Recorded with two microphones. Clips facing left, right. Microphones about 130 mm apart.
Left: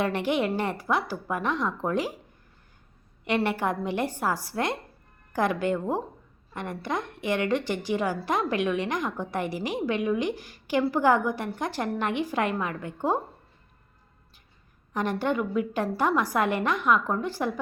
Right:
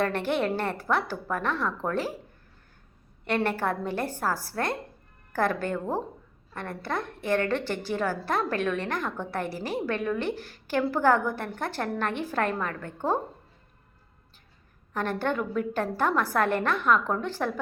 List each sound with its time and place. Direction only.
0.0 s a woman's voice: 15° left (ahead or behind)
3.2 s a woman's voice: 15° left (ahead or behind)
14.9 s a woman's voice: 15° left (ahead or behind)